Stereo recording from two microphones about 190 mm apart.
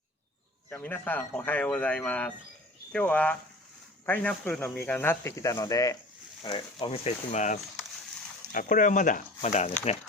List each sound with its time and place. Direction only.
0.7 s speech: 10° left (ahead or behind); by 9.7 s 35° left (ahead or behind)